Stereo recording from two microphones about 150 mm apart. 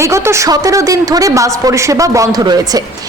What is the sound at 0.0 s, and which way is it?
A woman's voice, 20° right (ahead or behind).